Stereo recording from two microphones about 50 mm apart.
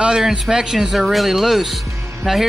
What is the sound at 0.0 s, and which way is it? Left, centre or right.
A man's voice, centre.